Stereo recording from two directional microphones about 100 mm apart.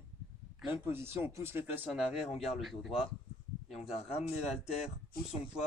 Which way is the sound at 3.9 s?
85° left.